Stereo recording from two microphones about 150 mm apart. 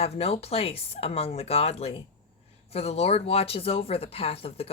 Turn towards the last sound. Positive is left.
turn(degrees=40)  # may be behind; listen again after turning